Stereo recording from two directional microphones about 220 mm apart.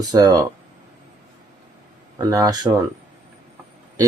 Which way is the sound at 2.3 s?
15° right (ahead or behind).